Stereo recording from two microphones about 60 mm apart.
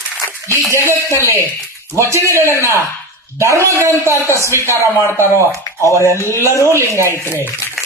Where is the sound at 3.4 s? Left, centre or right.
Right.